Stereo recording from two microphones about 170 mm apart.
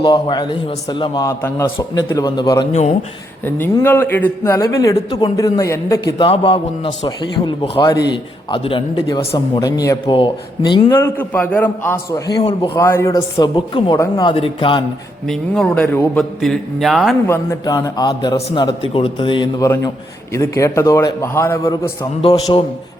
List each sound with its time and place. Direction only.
0.0 s a man's voice: 25° left (ahead or behind)
3.4 s speech: 10° left (ahead or behind)
6.1 s a man's voice: 30° left (ahead or behind)
10.8 s speech: 15° left (ahead or behind)
13.7 s a man's voice: 30° left (ahead or behind)
15.3 s a man's voice: 5° left (ahead or behind)
17.2 s a man's voice: 15° left (ahead or behind)
22.2 s a man's voice: 30° left (ahead or behind)